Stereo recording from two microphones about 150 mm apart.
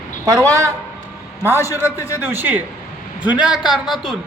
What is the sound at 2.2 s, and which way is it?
A man's voice, 15° right (ahead or behind).